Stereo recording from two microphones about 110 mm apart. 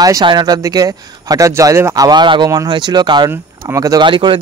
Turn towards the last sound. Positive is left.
turn(degrees=-50)  # may be behind; listen again after turning